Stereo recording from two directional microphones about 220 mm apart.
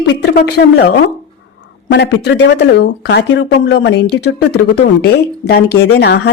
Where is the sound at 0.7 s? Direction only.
50° left (ahead or behind).